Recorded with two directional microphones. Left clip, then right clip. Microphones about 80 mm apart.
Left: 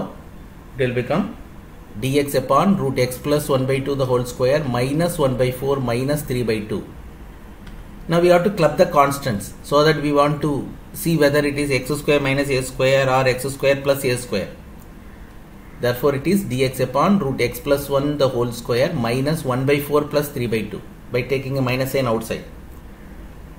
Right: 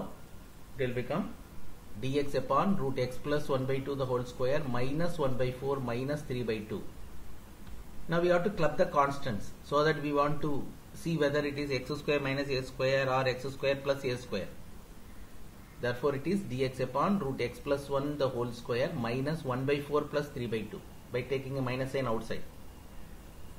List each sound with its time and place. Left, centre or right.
0.7 s speech: centre
8.1 s speech: centre
15.8 s speech: centre